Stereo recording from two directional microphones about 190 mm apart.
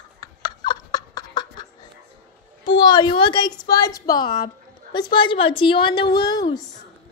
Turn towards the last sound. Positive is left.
turn(degrees=20)  # may be behind; listen again after turning